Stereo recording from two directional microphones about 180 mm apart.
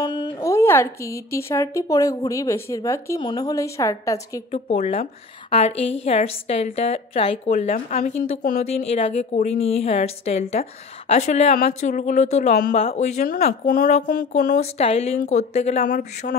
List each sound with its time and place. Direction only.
0.0 s speech: 25° left (ahead or behind)
4.5 s a woman's voice: 35° left (ahead or behind)
13.2 s speech: 55° left (ahead or behind)
14.3 s a woman's voice: 40° left (ahead or behind)